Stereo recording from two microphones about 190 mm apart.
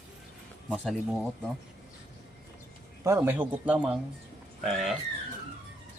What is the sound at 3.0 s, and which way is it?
A man's voice, 10° right (ahead or behind).